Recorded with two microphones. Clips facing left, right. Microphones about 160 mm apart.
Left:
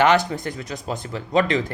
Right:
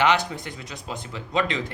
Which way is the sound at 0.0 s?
45° left (ahead or behind).